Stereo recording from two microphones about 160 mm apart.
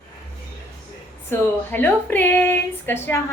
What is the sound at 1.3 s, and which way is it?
Speech, 15° left (ahead or behind).